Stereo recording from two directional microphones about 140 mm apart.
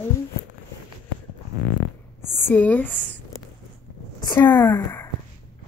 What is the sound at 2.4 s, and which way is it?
Speech, 15° left (ahead or behind).